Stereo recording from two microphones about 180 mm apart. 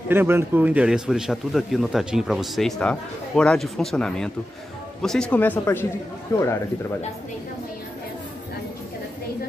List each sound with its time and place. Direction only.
0.1 s a man's voice: 10° right (ahead or behind); by 6.6 s 15° left (ahead or behind)